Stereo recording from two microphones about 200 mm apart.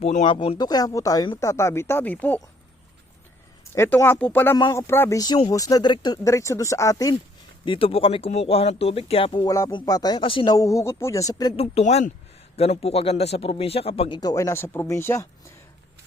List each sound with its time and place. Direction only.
0.0 s speech: 35° left (ahead or behind)
0.3 s speech: 25° left (ahead or behind); by 2.5 s 10° left (ahead or behind)
3.8 s speech: 10° left (ahead or behind)